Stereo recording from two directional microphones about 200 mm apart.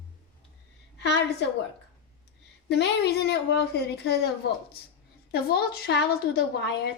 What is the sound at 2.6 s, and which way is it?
A woman's voice, 55° left (ahead or behind).